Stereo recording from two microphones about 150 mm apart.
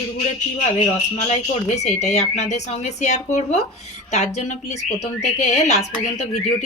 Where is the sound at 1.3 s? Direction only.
50° left (ahead or behind).